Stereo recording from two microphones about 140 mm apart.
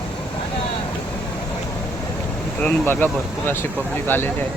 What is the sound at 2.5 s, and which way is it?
Speech, 10° left (ahead or behind).